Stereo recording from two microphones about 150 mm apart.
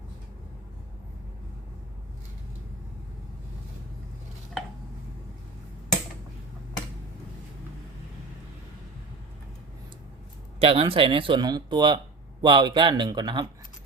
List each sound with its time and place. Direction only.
10.6 s speech: 40° right (ahead or behind)